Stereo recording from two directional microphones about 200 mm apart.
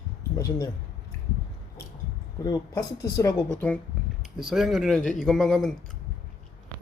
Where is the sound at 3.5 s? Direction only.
5° left (ahead or behind).